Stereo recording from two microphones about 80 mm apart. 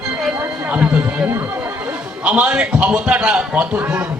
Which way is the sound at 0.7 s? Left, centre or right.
Centre.